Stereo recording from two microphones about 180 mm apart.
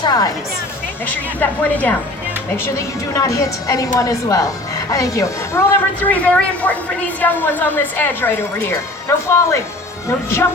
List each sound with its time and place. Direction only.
0.0 s speech: 20° left (ahead or behind)
1.0 s speech: 10° left (ahead or behind)